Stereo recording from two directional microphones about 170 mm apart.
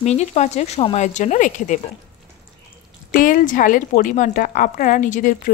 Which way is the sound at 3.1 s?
55° left (ahead or behind).